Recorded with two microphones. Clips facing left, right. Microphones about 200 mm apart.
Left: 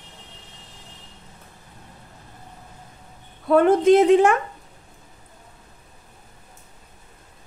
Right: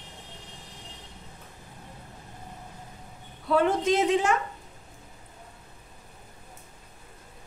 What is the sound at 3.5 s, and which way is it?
Speech, 55° left (ahead or behind).